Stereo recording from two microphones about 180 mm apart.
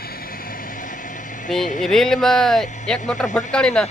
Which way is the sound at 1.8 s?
Centre (ahead or behind).